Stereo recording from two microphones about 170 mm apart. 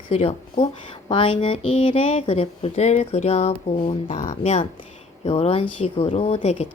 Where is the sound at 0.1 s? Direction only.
35° left (ahead or behind).